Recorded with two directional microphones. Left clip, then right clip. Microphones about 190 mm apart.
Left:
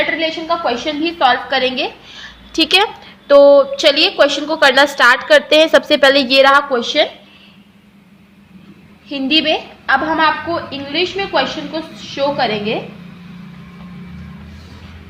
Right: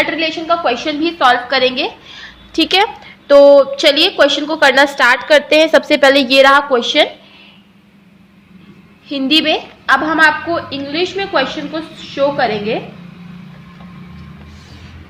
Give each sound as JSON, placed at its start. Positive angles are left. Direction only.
{"t": 0.0, "sound": "a woman's voice", "side_deg": -25}
{"t": 9.0, "sound": "a woman's voice", "side_deg": -20}